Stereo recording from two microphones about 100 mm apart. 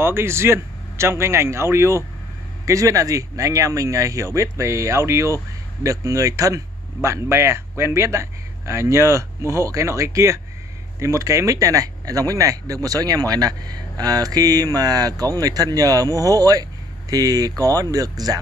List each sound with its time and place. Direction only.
0.0 s speech: 25° right (ahead or behind)